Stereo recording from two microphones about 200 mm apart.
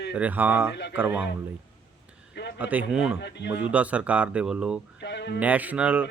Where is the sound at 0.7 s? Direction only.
60° left (ahead or behind).